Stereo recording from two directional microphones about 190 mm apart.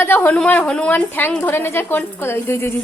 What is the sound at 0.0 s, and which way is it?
A woman's voice, 10° left (ahead or behind).